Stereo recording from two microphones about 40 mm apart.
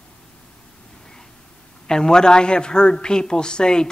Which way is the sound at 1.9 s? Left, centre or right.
Centre.